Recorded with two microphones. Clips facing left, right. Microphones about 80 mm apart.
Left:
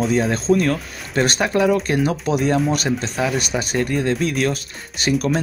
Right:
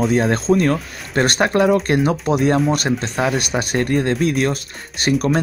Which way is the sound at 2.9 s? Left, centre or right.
Centre.